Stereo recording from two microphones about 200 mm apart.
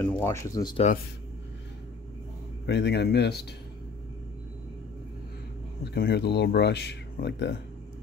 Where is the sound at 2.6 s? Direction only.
60° left (ahead or behind).